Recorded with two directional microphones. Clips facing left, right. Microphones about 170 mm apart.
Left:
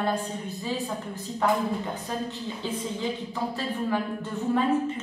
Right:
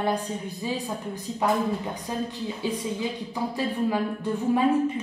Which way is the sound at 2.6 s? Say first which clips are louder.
Right 2 dB; 15° right (ahead or behind).